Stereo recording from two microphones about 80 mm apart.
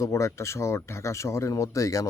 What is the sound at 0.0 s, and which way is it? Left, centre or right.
Speech, left.